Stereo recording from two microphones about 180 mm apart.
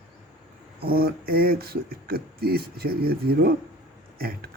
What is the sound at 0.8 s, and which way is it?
A man's voice, 55° right (ahead or behind).